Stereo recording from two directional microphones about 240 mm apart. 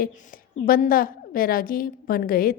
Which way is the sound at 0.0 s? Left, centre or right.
Left.